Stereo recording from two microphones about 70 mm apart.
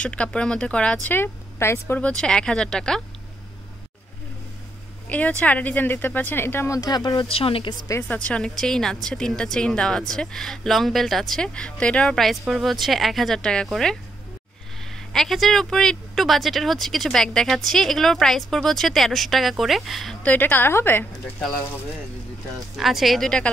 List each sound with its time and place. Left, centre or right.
0.0 s a woman's voice: centre
1.1 s speech: left
2.0 s a woman's voice: centre
5.1 s speech: left
6.7 s speech: left
8.1 s a woman's voice: centre
20.2 s a woman's voice: left
21.4 s a woman's voice: centre
22.8 s a woman's voice: centre